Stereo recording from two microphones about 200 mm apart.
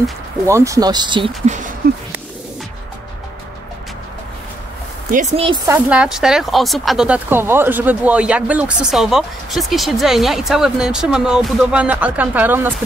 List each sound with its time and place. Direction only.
0.5 s speech: 15° right (ahead or behind)
1.4 s speech: 35° right (ahead or behind)
5.1 s speech: 35° right (ahead or behind)
5.7 s speech: 5° right (ahead or behind)